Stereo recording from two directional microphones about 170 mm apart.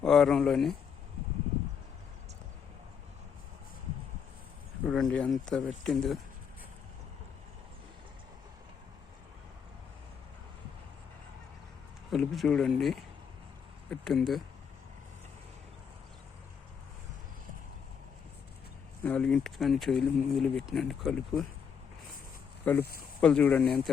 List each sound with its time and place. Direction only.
0.0 s speech: centre (ahead or behind)
4.9 s speech: 5° left (ahead or behind)
12.1 s speech: centre (ahead or behind)
19.0 s speech: 5° left (ahead or behind)
22.8 s speech: 65° left (ahead or behind)
23.2 s speech: 5° left (ahead or behind)